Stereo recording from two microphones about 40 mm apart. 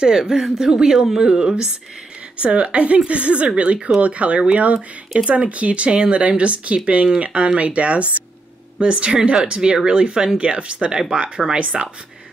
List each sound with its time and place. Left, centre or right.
0.0 s speech: centre
2.4 s speech: right